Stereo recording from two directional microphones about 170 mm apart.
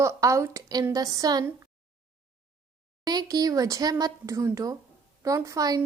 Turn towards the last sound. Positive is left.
turn(degrees=-20)  # may be behind; listen again after turning